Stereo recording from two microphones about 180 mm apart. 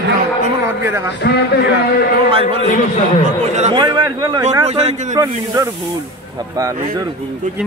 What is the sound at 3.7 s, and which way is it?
Speech, 25° right (ahead or behind).